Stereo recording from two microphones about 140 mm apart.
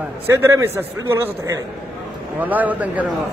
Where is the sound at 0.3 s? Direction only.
20° right (ahead or behind).